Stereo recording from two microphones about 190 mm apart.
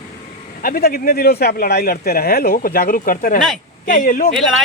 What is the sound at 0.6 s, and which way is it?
Speech, 50° left (ahead or behind).